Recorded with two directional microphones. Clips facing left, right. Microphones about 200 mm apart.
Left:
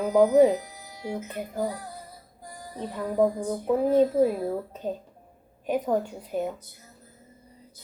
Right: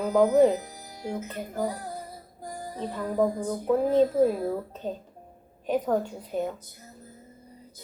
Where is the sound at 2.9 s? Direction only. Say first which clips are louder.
Left 2 dB; 5° left (ahead or behind).